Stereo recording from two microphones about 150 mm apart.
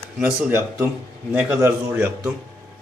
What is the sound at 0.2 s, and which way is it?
Speech, 10° right (ahead or behind).